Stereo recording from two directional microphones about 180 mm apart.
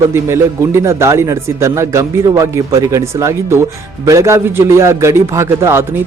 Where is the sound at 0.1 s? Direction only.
15° right (ahead or behind).